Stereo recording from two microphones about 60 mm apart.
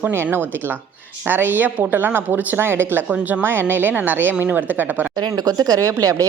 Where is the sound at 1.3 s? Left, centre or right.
Right.